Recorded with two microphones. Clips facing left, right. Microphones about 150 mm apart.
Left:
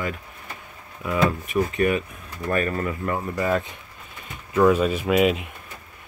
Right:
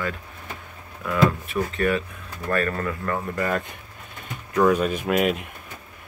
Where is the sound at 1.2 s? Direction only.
15° left (ahead or behind).